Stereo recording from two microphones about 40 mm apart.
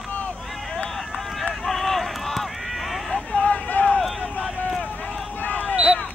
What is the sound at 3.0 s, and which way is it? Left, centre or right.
Vehicle, centre.